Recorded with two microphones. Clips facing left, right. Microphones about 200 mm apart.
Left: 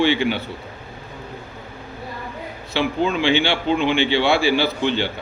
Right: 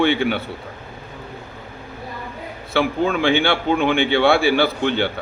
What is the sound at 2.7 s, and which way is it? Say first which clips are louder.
A man's voice: right 2 dB; 55° right (ahead or behind).